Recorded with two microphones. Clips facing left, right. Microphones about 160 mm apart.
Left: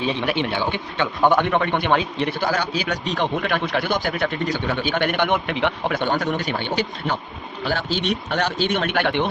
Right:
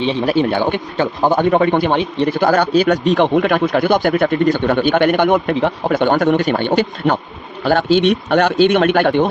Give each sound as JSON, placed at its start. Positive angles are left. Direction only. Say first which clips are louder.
{"t": 0.0, "sound": "speech", "louder": "right 7 dB", "side_deg": -35}
{"t": 1.2, "sound": "speech", "louder": "right 5 dB", "side_deg": -35}
{"t": 6.0, "sound": "a man's voice", "louder": "right 11 dB", "side_deg": -55}